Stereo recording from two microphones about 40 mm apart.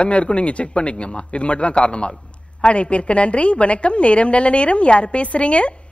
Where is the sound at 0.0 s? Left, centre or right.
Left.